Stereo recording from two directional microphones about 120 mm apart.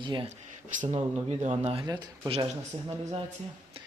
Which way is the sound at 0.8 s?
60° right (ahead or behind).